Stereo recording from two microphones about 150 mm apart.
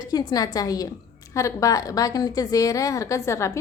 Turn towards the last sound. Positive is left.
turn(degrees=20)  # may be behind; listen again after turning